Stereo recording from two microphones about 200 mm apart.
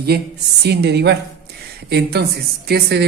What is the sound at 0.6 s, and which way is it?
Speech, 55° right (ahead or behind).